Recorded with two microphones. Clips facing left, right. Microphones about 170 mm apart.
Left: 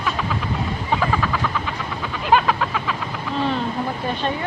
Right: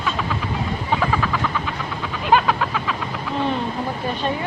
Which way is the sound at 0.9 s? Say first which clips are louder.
Even; centre (ahead or behind).